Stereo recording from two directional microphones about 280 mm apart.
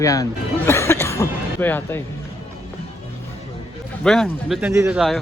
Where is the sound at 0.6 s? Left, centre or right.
Centre.